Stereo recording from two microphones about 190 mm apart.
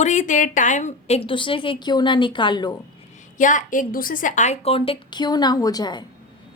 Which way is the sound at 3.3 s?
40° left (ahead or behind).